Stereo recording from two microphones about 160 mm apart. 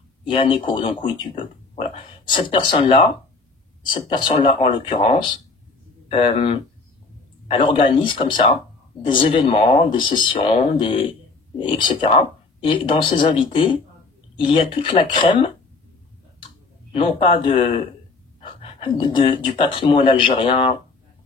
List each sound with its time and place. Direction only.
0.3 s speech: 30° left (ahead or behind)
6.0 s speech: 35° left (ahead or behind)
14.8 s speech: 30° left (ahead or behind)
16.9 s speech: 35° left (ahead or behind)